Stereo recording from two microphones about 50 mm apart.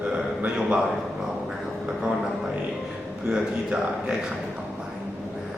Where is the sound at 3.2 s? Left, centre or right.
Centre.